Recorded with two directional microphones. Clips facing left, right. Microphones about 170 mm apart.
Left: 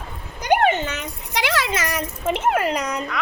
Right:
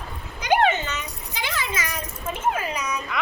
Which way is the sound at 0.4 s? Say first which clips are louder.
Left 2 dB; 65° left (ahead or behind).